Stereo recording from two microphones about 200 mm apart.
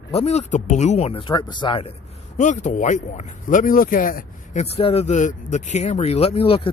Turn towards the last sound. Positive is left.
turn(degrees=30)  # may be behind; listen again after turning